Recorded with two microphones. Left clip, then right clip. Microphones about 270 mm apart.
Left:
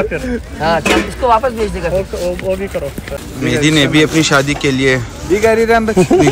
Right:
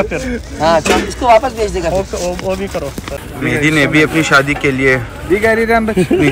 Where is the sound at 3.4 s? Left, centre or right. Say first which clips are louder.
Even; centre.